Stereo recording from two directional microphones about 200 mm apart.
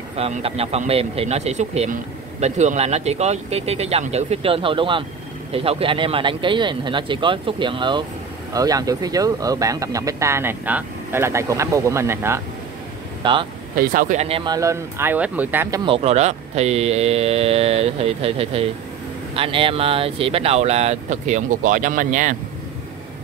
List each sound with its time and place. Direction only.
0.1 s speech: 30° right (ahead or behind); by 12.4 s 10° right (ahead or behind)
13.2 s speech: 25° right (ahead or behind)
13.7 s speech: 45° right (ahead or behind); by 15.8 s 10° right (ahead or behind)
15.8 s speech: 30° right (ahead or behind)